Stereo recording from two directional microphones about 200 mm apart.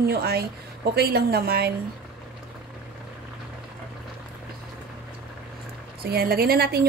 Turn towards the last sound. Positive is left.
turn(degrees=-50)  # may be behind; listen again after turning